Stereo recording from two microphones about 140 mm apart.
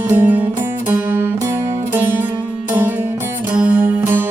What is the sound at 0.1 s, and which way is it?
Music, 15° right (ahead or behind).